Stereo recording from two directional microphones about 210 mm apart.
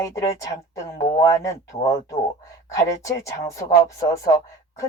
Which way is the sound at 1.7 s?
35° left (ahead or behind).